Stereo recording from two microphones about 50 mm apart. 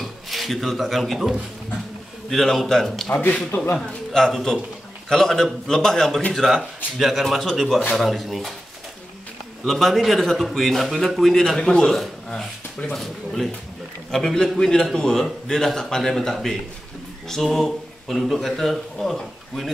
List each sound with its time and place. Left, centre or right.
0.0 s a man's voice: centre
9.7 s a man's voice: centre